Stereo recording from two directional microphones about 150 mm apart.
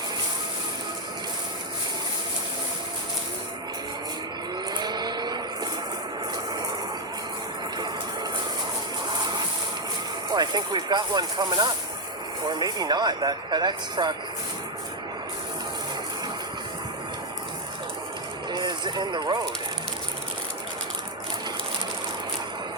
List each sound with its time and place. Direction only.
4.8 s vehicle: 30° right (ahead or behind)
10.3 s speech: 30° right (ahead or behind)
18.5 s a sound: 30° right (ahead or behind)